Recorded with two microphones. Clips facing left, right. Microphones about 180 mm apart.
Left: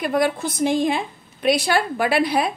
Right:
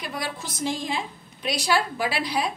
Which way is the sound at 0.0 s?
55° left (ahead or behind).